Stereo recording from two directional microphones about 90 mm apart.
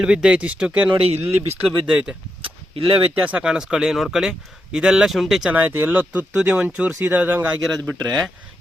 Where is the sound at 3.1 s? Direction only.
15° right (ahead or behind); by 5.5 s centre (ahead or behind).